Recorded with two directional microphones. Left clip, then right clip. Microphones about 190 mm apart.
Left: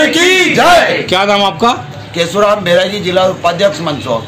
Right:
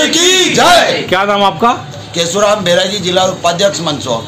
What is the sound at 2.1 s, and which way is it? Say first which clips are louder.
A man's voice: left 1 dB; 5° right (ahead or behind).